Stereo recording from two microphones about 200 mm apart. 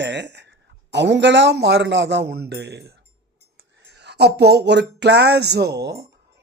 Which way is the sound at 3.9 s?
55° right (ahead or behind).